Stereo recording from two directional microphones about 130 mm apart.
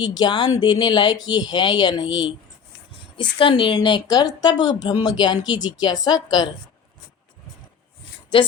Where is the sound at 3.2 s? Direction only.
40° left (ahead or behind).